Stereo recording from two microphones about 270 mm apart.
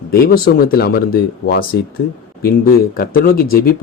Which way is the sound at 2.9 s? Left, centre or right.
Left.